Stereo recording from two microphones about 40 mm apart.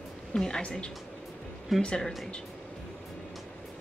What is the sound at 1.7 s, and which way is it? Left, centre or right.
Speech, centre.